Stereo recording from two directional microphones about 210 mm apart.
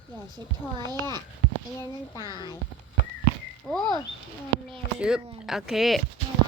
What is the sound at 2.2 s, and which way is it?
Speech, 20° left (ahead or behind).